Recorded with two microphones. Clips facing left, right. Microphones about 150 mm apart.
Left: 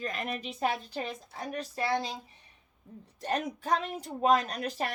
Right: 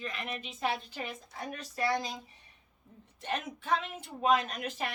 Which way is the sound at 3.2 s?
40° left (ahead or behind).